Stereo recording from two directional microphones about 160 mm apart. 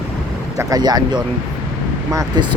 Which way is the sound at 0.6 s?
25° right (ahead or behind).